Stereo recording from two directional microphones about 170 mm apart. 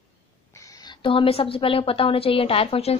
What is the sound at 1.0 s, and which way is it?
A woman's voice, 30° left (ahead or behind).